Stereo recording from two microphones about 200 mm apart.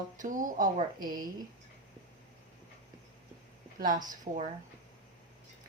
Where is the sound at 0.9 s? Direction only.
20° right (ahead or behind).